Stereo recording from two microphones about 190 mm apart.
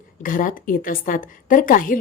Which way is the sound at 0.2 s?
45° left (ahead or behind).